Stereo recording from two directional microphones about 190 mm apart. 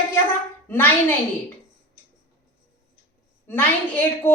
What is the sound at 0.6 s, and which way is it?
Speech, 10° left (ahead or behind).